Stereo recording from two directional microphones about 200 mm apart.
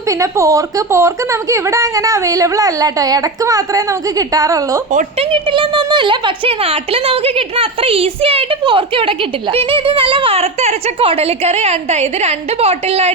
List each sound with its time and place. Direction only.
0.1 s a woman's voice: 15° right (ahead or behind); by 13.1 s 30° right (ahead or behind)